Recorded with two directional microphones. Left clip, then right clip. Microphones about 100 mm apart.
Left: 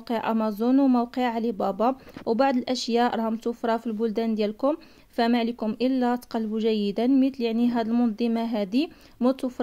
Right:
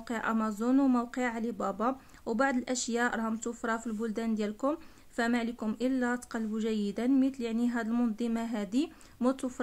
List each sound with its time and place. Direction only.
0.1 s speech: 30° left (ahead or behind)